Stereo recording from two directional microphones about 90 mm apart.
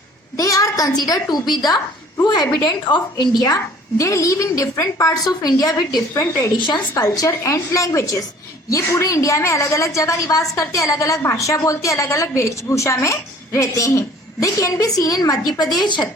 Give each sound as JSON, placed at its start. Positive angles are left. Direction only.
{"t": 0.3, "sound": "a woman's voice", "side_deg": 40}